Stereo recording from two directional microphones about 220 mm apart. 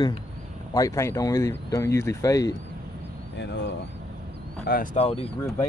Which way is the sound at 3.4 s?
50° left (ahead or behind).